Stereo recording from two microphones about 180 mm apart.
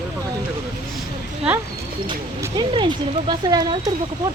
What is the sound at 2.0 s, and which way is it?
Speech, 20° right (ahead or behind).